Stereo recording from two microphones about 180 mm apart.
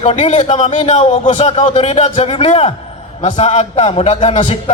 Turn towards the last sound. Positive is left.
turn(degrees=40)  # may be behind; listen again after turning